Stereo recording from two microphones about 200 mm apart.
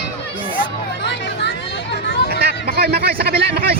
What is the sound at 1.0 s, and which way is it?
Hubbub, 60° left (ahead or behind).